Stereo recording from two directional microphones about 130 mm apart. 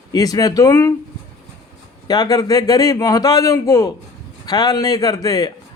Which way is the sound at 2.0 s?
30° left (ahead or behind).